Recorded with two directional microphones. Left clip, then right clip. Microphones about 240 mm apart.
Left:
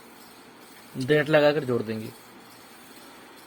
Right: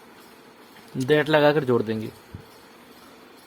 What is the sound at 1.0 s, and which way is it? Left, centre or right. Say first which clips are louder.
Speech: right 2 dB; right.